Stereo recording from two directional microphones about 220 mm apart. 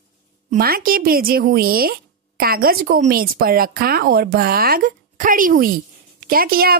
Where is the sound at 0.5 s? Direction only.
40° right (ahead or behind).